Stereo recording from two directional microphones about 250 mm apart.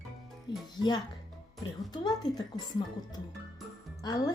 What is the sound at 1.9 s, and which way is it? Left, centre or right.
Speech, centre.